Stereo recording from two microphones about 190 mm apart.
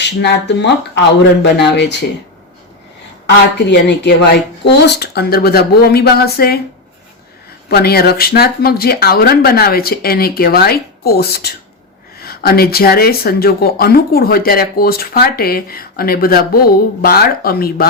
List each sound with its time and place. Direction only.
0.0 s speech: 65° left (ahead or behind)
3.7 s speech: 65° left (ahead or behind)
7.7 s speech: 55° left (ahead or behind)